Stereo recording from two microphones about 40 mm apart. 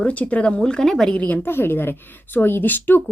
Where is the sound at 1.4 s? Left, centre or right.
Left.